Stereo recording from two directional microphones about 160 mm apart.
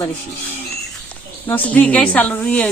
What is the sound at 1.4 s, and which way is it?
A woman's voice, 10° left (ahead or behind).